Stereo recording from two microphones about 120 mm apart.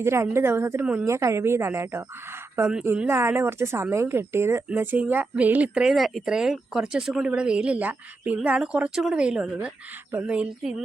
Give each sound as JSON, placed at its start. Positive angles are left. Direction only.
{"t": 0.0, "sound": "a woman's voice", "side_deg": -20}